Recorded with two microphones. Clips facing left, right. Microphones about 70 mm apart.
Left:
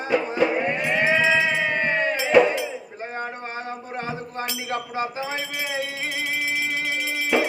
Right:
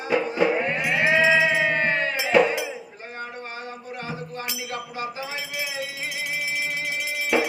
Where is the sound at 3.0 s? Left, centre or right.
Left.